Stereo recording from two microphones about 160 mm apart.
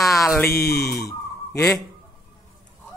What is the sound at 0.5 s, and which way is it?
Speech, 80° left.